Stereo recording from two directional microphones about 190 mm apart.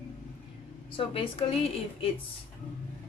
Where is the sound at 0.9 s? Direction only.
30° left (ahead or behind).